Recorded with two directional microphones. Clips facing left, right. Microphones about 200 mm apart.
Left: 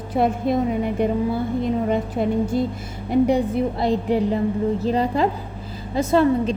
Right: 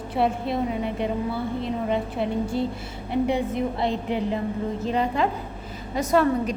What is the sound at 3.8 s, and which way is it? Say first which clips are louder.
A woman's voice: left 5 dB; 35° left (ahead or behind).